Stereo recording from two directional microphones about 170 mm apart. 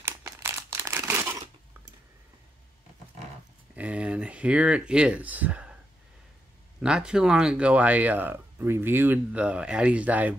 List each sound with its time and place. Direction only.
0.0 s crumpling: 15° right (ahead or behind)
3.7 s speech: 10° right (ahead or behind)
6.8 s speech: 5° right (ahead or behind)